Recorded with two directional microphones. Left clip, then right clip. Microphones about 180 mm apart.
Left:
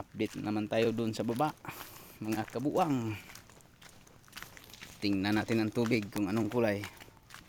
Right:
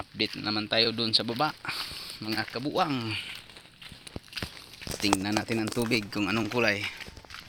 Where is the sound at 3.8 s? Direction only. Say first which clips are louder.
Right 15 dB; 10° right (ahead or behind).